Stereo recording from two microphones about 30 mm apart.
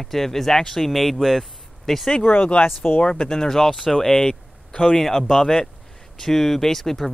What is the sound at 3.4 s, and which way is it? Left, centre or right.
Speech, centre.